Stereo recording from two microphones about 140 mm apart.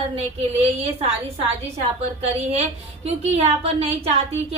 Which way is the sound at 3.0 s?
50° right (ahead or behind).